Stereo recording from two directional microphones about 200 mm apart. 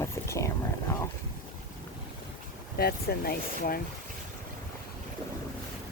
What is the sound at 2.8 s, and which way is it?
Speech, 50° left (ahead or behind).